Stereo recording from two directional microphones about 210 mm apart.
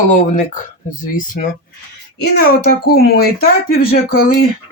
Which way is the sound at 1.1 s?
40° left (ahead or behind).